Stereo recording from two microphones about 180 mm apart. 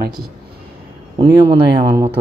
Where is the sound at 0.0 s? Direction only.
55° right (ahead or behind).